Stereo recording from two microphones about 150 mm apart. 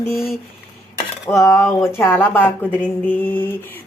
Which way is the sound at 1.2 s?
20° left (ahead or behind).